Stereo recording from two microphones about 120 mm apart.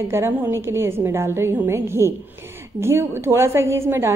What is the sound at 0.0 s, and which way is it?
A woman's voice, 20° right (ahead or behind).